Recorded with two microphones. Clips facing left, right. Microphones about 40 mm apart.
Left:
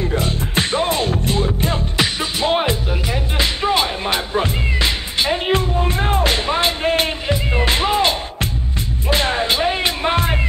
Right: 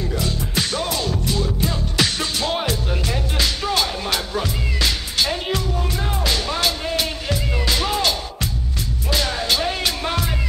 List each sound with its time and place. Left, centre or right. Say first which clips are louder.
0.0 s music: left 4 dB; left
2.0 s music: even; left
5.6 s music: left 5 dB; left